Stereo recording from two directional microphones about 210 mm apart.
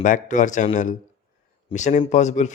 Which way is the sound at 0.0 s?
35° left (ahead or behind).